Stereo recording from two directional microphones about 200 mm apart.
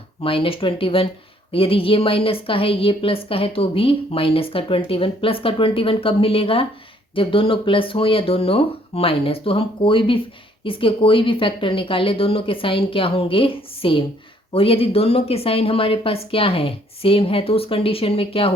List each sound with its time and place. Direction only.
0.2 s a woman's voice: 25° left (ahead or behind)